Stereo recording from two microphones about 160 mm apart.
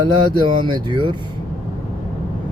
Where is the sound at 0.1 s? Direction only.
30° right (ahead or behind).